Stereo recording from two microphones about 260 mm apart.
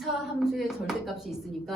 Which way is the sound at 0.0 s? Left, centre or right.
Centre.